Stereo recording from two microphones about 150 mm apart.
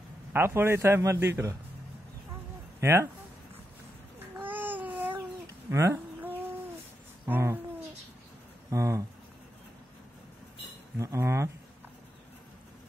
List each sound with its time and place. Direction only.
0.3 s a man's voice: 15° right (ahead or behind)
2.8 s a man's voice: 15° right (ahead or behind)
4.4 s babbling: 10° right (ahead or behind)
5.7 s a sound: 20° right (ahead or behind)
7.2 s a man's voice: 15° right (ahead or behind)
8.6 s speech: 20° right (ahead or behind)
11.0 s cutlery: 20° right (ahead or behind)